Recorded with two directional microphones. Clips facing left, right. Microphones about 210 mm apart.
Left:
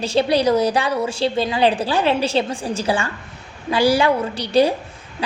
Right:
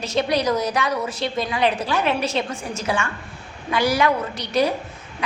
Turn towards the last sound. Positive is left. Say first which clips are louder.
# left 5 dB
turn(degrees=30)  # may be behind; listen again after turning